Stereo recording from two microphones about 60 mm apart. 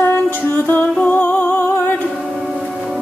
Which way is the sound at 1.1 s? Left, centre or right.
Left.